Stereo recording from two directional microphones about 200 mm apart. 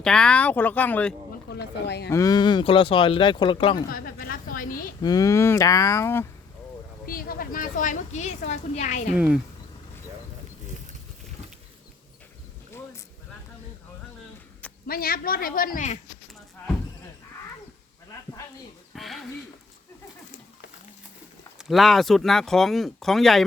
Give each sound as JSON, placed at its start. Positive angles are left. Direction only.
{"t": 0.0, "sound": "speech", "side_deg": 5}
{"t": 1.5, "sound": "speech", "side_deg": 55}
{"t": 2.0, "sound": "speech", "side_deg": 15}
{"t": 3.8, "sound": "a woman's voice", "side_deg": 50}
{"t": 5.0, "sound": "speech", "side_deg": 15}
{"t": 7.0, "sound": "a woman's voice", "side_deg": 45}
{"t": 9.1, "sound": "speech", "side_deg": -5}
{"t": 14.8, "sound": "a man's voice", "side_deg": 50}
{"t": 18.9, "sound": "speech", "side_deg": 0}
{"t": 21.6, "sound": "speech", "side_deg": 0}